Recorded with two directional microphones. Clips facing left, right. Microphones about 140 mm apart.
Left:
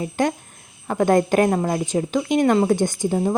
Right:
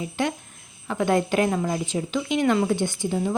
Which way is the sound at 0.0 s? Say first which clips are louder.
Left 5 dB; 45° left (ahead or behind).